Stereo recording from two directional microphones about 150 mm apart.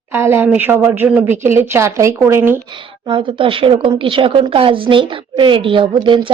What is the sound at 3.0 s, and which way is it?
A man's voice, 35° right (ahead or behind).